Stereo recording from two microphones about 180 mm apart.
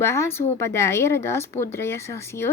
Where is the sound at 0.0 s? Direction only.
15° left (ahead or behind).